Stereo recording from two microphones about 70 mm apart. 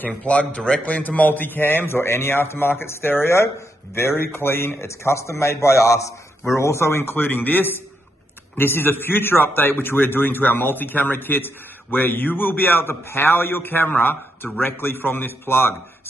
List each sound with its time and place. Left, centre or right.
0.0 s a man's voice: centre